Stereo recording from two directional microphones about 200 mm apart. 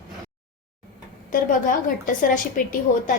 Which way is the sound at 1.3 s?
40° left (ahead or behind).